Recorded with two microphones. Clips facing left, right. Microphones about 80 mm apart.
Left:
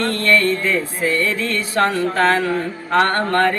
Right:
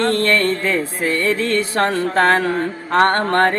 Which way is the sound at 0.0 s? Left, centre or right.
Right.